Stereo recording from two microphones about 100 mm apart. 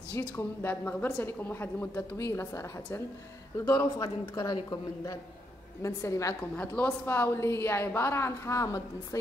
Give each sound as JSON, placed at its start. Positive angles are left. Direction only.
{"t": 0.2, "sound": "a woman's voice", "side_deg": 20}
{"t": 6.5, "sound": "a woman's voice", "side_deg": 15}